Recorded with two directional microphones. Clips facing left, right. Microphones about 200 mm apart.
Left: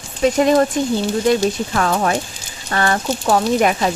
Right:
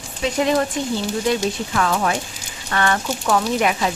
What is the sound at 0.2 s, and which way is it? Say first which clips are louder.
Speech: left 5 dB; 45° left (ahead or behind).